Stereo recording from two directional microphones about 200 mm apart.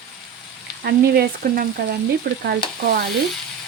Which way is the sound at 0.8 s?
50° right (ahead or behind).